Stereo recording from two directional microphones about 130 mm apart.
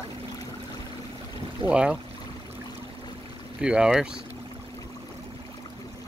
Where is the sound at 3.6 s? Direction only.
5° right (ahead or behind).